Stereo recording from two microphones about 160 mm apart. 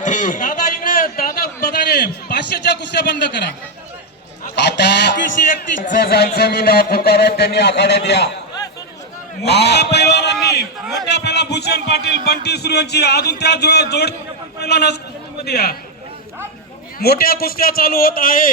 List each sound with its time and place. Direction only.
0.0 s a sound: 50° left (ahead or behind); by 3.4 s 90° left
4.4 s a sound: 90° left
6.0 s speech: 90° left
9.4 s a man's voice: 90° left
11.1 s music: 90° left
12.2 s a man's voice: 90° left
17.0 s a man's voice: 75° left (ahead or behind)